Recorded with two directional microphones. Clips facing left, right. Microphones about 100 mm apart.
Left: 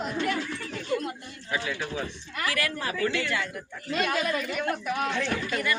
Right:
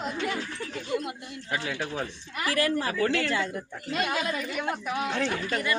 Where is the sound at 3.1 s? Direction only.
45° right (ahead or behind).